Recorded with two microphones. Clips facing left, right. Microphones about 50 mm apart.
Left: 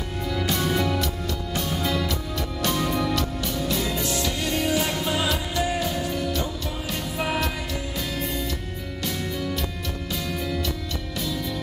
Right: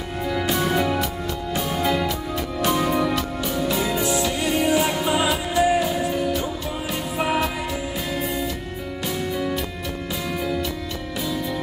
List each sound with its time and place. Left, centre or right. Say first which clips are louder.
0.3 s music: right 3 dB; centre
9.0 s music: right 4 dB; centre